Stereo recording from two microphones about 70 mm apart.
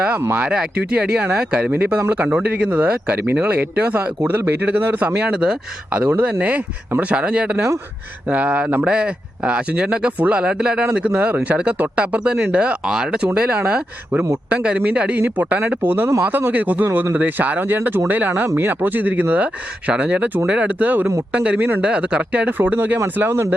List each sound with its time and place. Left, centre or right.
0.3 s speech: centre
7.5 s speech: right
8.3 s speech: centre; by 23.6 s right